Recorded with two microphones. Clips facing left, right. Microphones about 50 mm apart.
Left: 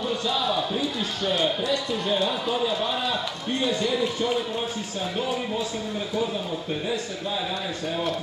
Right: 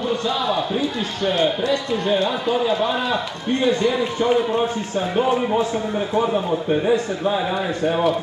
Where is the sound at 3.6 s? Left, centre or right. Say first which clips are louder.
Right 5 dB; right.